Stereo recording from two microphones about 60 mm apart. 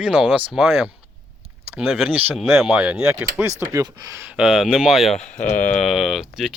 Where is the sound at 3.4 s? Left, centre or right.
Right.